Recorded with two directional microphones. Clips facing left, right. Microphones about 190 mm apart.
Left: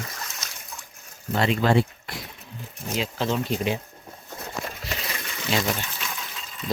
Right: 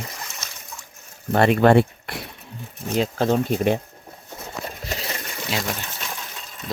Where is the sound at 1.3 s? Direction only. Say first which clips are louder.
Right 6 dB; 55° right (ahead or behind).